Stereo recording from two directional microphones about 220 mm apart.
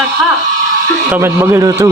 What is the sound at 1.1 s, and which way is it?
Speech, 10° right (ahead or behind).